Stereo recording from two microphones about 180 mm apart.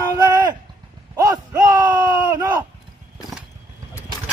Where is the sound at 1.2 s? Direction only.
20° right (ahead or behind).